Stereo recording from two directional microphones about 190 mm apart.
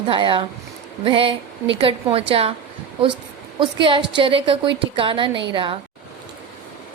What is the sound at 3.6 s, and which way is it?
A woman's voice, 25° right (ahead or behind).